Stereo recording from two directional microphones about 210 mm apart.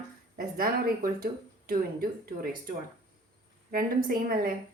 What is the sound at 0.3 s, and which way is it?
Speech, 45° right (ahead or behind).